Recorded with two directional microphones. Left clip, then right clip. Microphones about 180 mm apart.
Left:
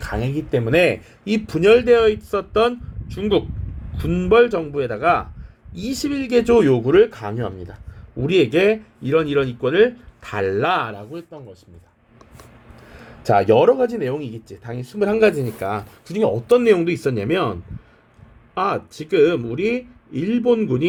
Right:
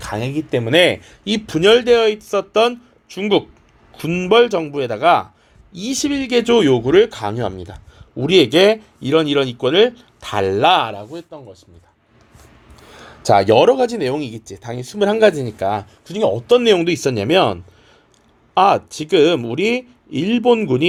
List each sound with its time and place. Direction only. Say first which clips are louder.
0.0 s speech: right 2 dB; 25° right (ahead or behind)
13.5 s speech: right 2 dB; 35° right (ahead or behind)